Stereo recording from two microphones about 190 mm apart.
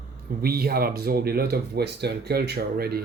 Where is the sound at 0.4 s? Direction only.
55° right (ahead or behind).